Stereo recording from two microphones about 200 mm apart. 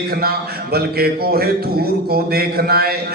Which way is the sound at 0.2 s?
50° right (ahead or behind).